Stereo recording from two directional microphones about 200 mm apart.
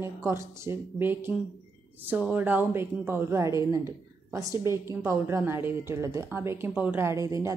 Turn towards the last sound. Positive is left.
turn(degrees=-15)  # may be behind; listen again after turning